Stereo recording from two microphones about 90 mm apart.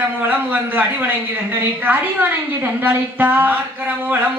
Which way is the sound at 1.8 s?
20° right (ahead or behind).